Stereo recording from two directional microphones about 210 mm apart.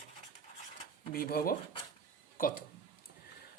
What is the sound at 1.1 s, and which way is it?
Speech, 45° left (ahead or behind).